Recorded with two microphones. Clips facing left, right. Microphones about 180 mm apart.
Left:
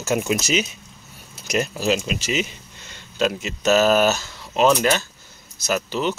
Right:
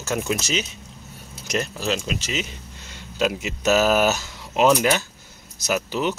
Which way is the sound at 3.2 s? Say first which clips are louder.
Left 1 dB; 10° right (ahead or behind).